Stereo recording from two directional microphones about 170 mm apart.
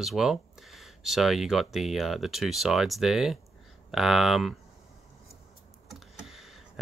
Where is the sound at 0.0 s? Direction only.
Centre (ahead or behind).